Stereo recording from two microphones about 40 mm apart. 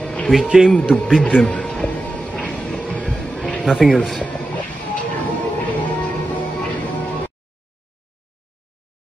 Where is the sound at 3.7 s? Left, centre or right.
Centre.